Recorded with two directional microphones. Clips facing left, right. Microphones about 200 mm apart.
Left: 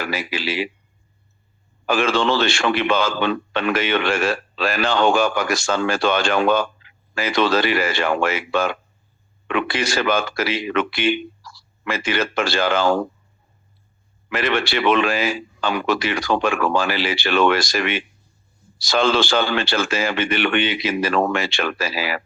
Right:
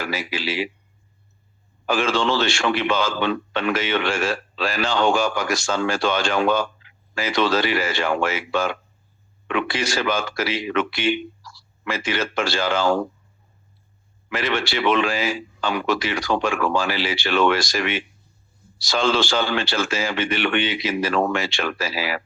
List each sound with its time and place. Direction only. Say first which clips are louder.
0.0 s a man's voice: left 1 dB; 60° left (ahead or behind)
1.9 s a man's voice: left 2 dB; 60° left (ahead or behind)
14.3 s a man's voice: left 3 dB; 60° left (ahead or behind)